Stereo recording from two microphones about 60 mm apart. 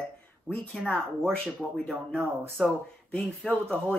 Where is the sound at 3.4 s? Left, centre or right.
Centre.